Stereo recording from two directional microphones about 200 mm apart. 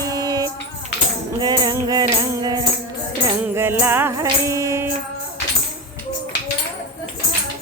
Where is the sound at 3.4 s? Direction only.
10° right (ahead or behind).